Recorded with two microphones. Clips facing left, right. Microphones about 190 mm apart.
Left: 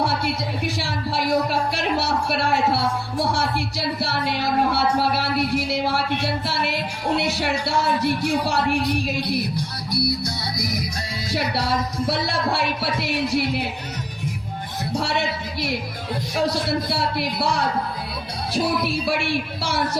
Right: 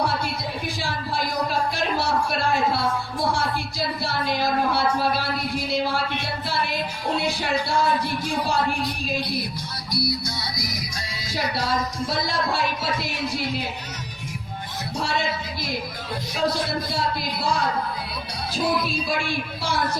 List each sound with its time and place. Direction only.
0.8 s music: 70° left (ahead or behind)
3.3 s speech: 65° left (ahead or behind)
9.9 s music: 60° left (ahead or behind)
11.3 s speech: 65° left (ahead or behind)
16.5 s speech: 70° left (ahead or behind)